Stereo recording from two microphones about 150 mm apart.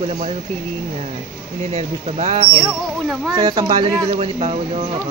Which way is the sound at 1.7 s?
45° right (ahead or behind).